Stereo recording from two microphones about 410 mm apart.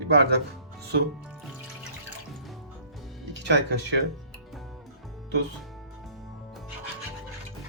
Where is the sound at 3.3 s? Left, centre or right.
Right.